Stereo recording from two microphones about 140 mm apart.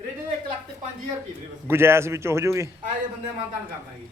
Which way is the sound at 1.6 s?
15° right (ahead or behind).